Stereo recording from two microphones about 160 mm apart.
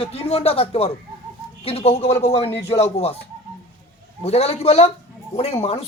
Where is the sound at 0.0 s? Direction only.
40° left (ahead or behind).